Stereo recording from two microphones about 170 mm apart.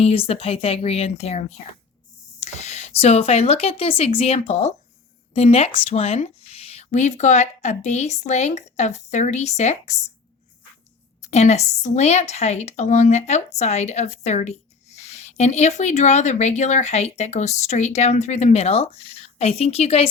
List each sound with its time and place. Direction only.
0.0 s a woman's voice: 35° left (ahead or behind)
11.2 s a woman's voice: 40° left (ahead or behind)